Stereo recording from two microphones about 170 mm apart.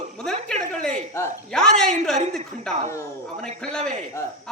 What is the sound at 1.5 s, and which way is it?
A man's voice, 5° left (ahead or behind).